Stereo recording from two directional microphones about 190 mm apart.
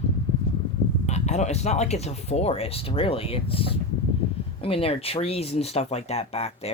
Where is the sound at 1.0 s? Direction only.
35° left (ahead or behind).